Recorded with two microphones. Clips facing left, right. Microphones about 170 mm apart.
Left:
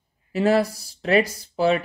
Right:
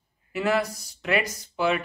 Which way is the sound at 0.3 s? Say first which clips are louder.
Left 5 dB; 35° left (ahead or behind).